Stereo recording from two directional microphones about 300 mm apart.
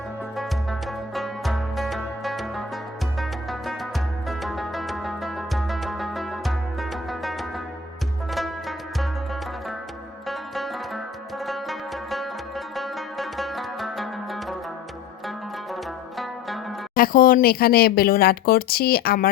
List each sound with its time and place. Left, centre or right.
0.3 s music: centre
15.7 s music: centre
16.9 s speech: left